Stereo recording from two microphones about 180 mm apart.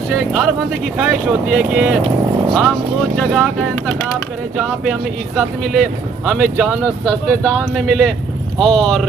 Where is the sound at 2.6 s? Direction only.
Centre (ahead or behind).